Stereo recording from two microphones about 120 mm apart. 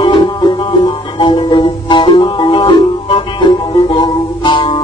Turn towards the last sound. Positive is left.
turn(degrees=45)  # may be behind; listen again after turning